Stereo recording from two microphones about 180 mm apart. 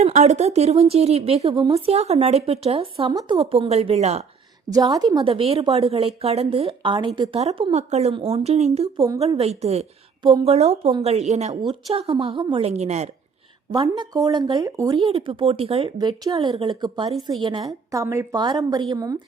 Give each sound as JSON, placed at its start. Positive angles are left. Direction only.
{"t": 0.0, "sound": "speech", "side_deg": -40}
{"t": 4.7, "sound": "speech", "side_deg": -20}
{"t": 13.7, "sound": "speech", "side_deg": -25}